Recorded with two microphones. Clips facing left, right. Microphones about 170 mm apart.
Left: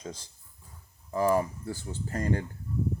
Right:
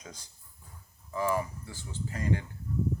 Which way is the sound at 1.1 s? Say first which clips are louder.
Left 5 dB; 40° left (ahead or behind).